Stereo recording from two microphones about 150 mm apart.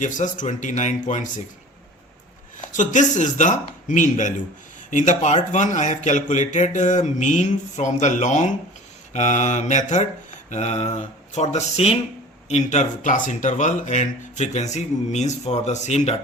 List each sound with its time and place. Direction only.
0.0 s speech: 55° left (ahead or behind)
2.6 s speech: 55° left (ahead or behind)